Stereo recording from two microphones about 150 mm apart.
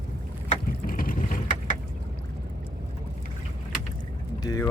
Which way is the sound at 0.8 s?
70° left (ahead or behind).